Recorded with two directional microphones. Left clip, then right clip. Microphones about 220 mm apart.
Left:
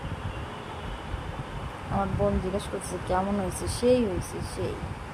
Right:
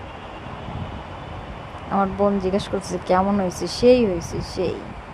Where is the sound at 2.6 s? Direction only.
25° right (ahead or behind).